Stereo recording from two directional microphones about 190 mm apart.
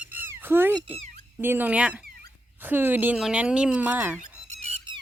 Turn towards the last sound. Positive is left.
turn(degrees=-30)  # may be behind; listen again after turning